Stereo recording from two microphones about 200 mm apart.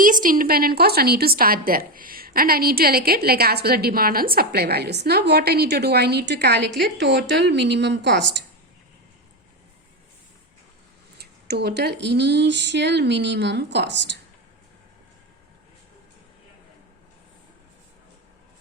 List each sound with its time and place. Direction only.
0.0 s a woman's voice: 40° right (ahead or behind); by 8.3 s 60° right (ahead or behind)
11.2 s speech: 55° right (ahead or behind)